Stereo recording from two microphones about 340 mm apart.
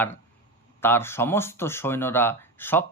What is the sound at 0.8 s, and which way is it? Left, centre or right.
Speech, centre.